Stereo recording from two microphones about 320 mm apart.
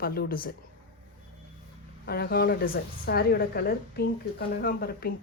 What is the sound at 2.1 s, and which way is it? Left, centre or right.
Speech, left.